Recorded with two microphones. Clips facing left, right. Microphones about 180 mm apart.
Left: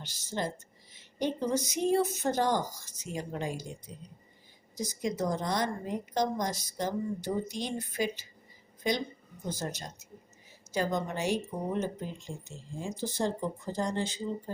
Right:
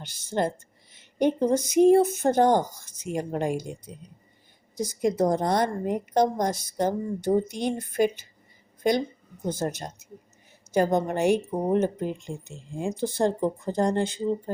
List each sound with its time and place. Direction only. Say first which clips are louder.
0.0 s speech: right 8 dB; 55° right (ahead or behind)
9.4 s speech: right 8 dB; 50° right (ahead or behind)